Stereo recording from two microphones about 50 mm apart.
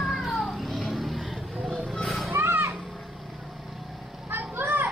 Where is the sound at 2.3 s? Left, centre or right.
Right.